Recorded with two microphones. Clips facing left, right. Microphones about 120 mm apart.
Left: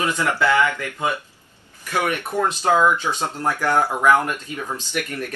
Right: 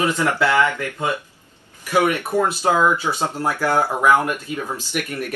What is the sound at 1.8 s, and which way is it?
Speech, 15° right (ahead or behind).